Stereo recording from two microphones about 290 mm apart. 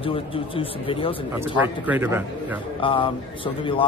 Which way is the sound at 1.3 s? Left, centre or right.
Centre.